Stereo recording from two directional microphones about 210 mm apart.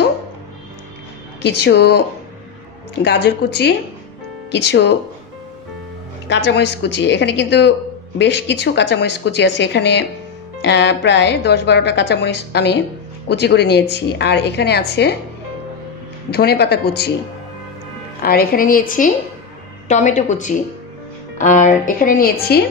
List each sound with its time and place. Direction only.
1.4 s a woman's voice: 55° left (ahead or behind)
6.2 s a woman's voice: 55° left (ahead or behind)
16.3 s a woman's voice: 50° left (ahead or behind)
18.2 s a woman's voice: 45° left (ahead or behind)